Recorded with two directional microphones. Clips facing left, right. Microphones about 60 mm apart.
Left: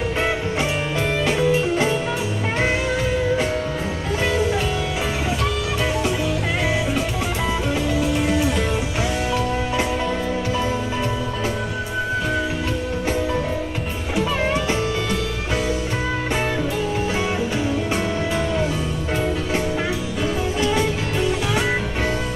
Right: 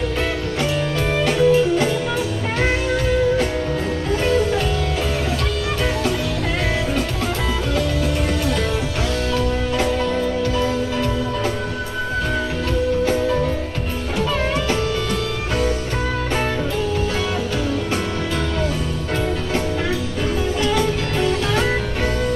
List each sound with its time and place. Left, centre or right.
1.2 s music: left
14.1 s music: centre